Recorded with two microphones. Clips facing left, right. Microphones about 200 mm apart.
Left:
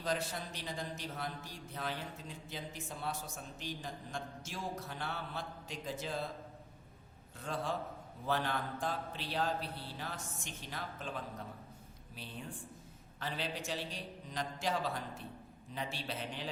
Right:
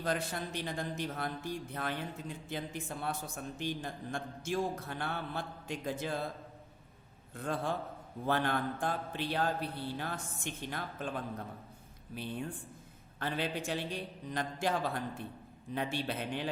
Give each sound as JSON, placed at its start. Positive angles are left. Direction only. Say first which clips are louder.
{"t": 0.0, "sound": "speech", "louder": "right 2 dB", "side_deg": -55}
{"t": 7.3, "sound": "speech", "louder": "right 3 dB", "side_deg": -55}